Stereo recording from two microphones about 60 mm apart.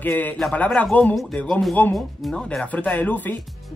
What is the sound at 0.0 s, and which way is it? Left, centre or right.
Speech, left.